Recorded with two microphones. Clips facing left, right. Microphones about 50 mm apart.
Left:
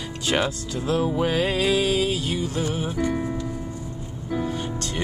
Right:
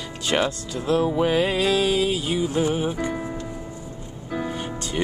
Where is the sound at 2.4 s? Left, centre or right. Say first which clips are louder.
Right 4 dB; right.